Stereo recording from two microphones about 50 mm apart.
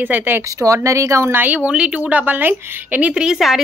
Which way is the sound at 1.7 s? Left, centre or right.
Right.